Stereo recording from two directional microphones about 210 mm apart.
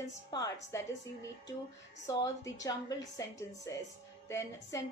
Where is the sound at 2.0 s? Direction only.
15° left (ahead or behind).